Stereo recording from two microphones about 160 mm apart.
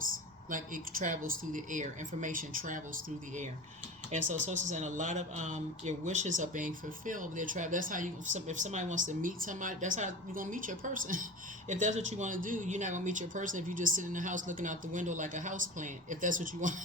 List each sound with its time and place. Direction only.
0.5 s speech: 55° right (ahead or behind)
4.1 s speech: 50° right (ahead or behind)